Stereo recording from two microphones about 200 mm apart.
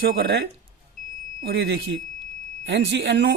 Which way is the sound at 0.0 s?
50° right (ahead or behind).